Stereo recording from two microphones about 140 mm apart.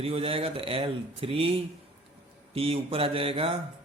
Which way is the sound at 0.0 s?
45° right (ahead or behind).